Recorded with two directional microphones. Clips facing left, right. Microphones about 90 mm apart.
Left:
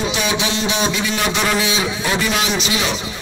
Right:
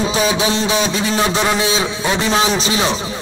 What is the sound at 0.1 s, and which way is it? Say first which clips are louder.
A man's voice: right 4 dB; 35° right (ahead or behind).